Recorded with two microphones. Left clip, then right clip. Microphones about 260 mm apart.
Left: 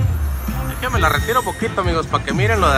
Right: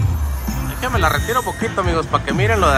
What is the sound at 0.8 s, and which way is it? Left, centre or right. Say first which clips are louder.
Speech: even; centre.